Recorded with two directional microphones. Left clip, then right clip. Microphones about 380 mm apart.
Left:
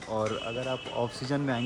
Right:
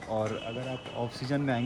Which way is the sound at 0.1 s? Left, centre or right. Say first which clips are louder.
Left 1 dB; centre.